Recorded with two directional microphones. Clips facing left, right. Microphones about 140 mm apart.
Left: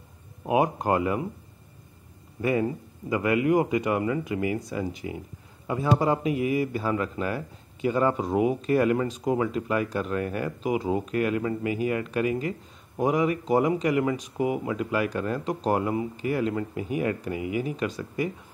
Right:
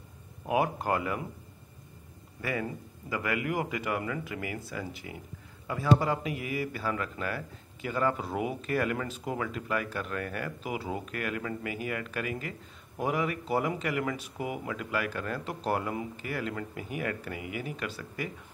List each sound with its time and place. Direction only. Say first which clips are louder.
0.5 s speech: left 5 dB; 25° left (ahead or behind)
2.4 s speech: left 8 dB; 25° left (ahead or behind)
9.5 s speech: left 6 dB; 25° left (ahead or behind)